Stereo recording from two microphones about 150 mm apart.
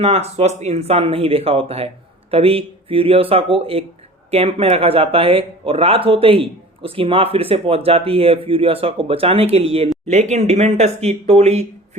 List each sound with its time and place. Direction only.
0.0 s speech: 45° right (ahead or behind)